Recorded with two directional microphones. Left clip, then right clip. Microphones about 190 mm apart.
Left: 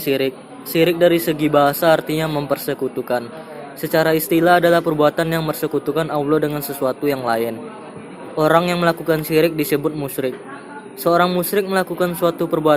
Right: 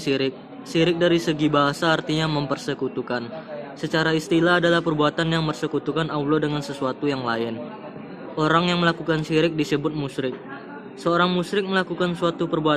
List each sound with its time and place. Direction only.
0.0 s a man's voice: 20° right (ahead or behind)